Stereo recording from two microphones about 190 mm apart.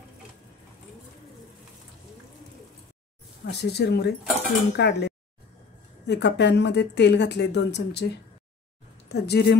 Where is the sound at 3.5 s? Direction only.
60° left (ahead or behind).